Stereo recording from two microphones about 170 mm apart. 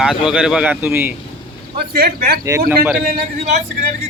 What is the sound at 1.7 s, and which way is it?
Speech, 65° right (ahead or behind).